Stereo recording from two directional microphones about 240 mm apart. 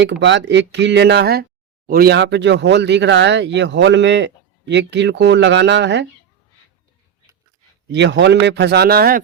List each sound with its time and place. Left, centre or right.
0.0 s speech: right
7.9 s speech: right